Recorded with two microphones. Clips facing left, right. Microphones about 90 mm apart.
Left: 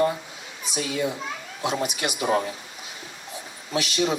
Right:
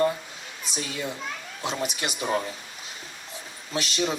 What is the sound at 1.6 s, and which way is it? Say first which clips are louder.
Speech: left 3 dB; 10° left (ahead or behind).